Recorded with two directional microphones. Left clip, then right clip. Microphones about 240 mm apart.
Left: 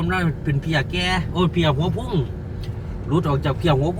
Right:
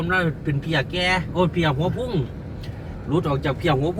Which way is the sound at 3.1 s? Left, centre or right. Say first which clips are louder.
Left 1 dB; centre.